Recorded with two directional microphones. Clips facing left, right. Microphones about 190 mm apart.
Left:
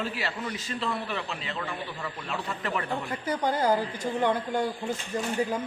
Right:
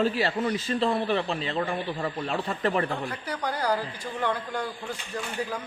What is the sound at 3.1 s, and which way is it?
Speech, 20° left (ahead or behind).